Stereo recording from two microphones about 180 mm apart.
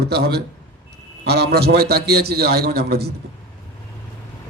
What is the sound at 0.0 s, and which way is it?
Speech, 65° right (ahead or behind).